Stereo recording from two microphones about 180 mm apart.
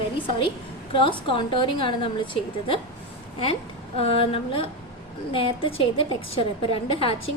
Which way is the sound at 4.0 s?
30° left (ahead or behind).